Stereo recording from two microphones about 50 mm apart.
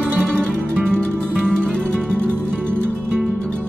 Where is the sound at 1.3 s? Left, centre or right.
Centre.